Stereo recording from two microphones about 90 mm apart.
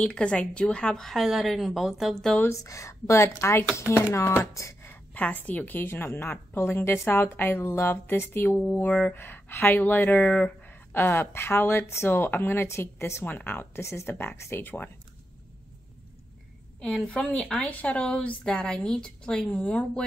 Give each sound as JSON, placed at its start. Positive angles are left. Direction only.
{"t": 0.0, "sound": "a woman's voice", "side_deg": 15}
{"t": 2.4, "sound": "speech", "side_deg": 35}
{"t": 5.1, "sound": "speech", "side_deg": 20}
{"t": 16.8, "sound": "a woman's voice", "side_deg": 10}